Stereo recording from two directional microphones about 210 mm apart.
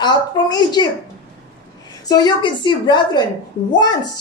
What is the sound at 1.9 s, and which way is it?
A woman's voice, 20° left (ahead or behind).